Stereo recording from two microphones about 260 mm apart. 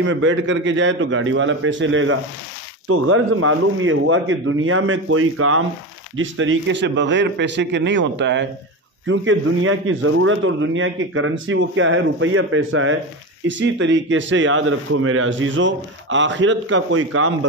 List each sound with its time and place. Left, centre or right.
0.0 s a man's voice: right